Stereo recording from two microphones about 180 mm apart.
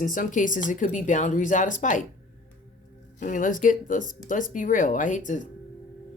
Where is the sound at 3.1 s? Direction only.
45° left (ahead or behind).